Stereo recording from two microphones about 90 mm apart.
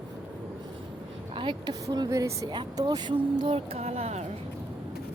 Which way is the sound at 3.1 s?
75° right (ahead or behind).